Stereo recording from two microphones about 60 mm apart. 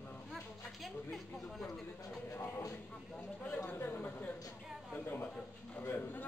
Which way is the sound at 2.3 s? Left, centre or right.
Left.